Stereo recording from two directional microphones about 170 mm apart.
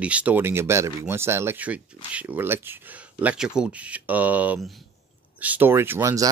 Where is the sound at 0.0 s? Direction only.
10° right (ahead or behind).